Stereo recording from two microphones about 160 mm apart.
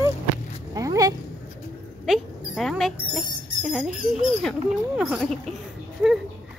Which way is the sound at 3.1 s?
Centre (ahead or behind).